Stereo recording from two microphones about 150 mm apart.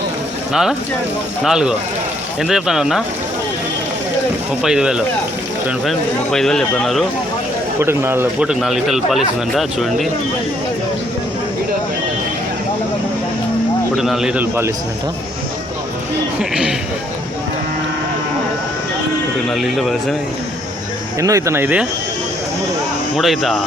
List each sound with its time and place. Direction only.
0.5 s speech: 5° right (ahead or behind)
4.6 s speech: 5° right (ahead or behind)
7.8 s a man's voice: 15° right (ahead or behind)
8.4 s speech: centre (ahead or behind)
13.9 s speech: centre (ahead or behind)
16.4 s speech: 5° right (ahead or behind)
19.5 s speech: centre (ahead or behind)
21.2 s a man's voice: 20° right (ahead or behind)
23.1 s speech: centre (ahead or behind)